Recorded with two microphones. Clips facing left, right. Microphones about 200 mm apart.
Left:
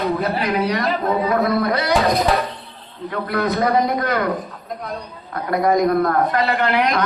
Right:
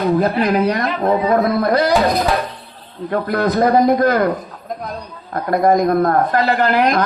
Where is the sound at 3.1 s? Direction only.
45° right (ahead or behind).